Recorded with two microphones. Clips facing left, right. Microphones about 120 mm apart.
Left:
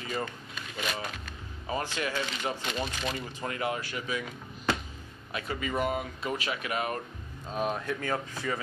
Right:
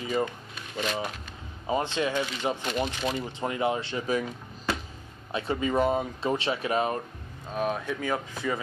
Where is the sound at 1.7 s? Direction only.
20° right (ahead or behind).